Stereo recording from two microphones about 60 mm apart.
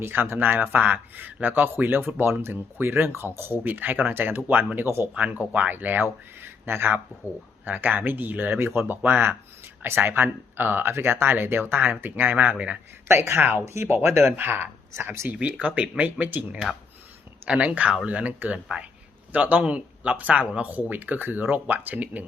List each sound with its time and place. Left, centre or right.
0.0 s speech: right
13.1 s speech: right
15.4 s speech: right